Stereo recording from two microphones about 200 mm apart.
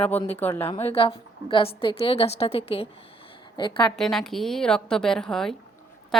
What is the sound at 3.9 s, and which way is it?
A woman's voice, centre (ahead or behind).